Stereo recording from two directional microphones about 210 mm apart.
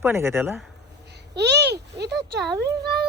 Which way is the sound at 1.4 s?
55° right (ahead or behind).